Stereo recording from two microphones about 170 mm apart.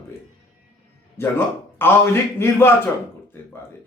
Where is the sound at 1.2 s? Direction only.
15° left (ahead or behind).